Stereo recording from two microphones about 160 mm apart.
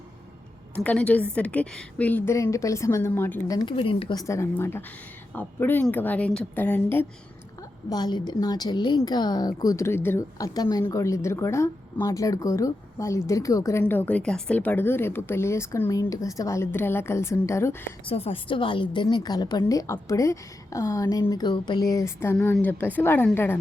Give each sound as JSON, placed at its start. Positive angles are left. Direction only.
{"t": 0.8, "sound": "a woman's voice", "side_deg": 5}
{"t": 3.5, "sound": "a woman's voice", "side_deg": 25}
{"t": 3.8, "sound": "speech", "side_deg": 35}
{"t": 4.2, "sound": "a woman's voice", "side_deg": 20}
{"t": 7.9, "sound": "a woman's voice", "side_deg": 25}
{"t": 18.0, "sound": "a woman's voice", "side_deg": 35}